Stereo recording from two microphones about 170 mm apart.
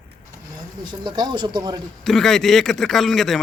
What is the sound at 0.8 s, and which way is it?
Speech, 25° right (ahead or behind).